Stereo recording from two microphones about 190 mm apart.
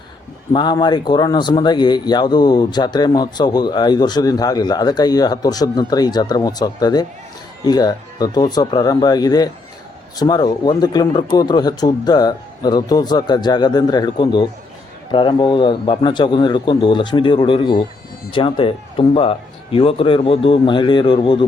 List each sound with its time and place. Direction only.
0.5 s speech: 25° left (ahead or behind)